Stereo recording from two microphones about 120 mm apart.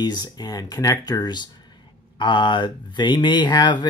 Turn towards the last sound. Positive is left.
turn(degrees=35)  # may be behind; listen again after turning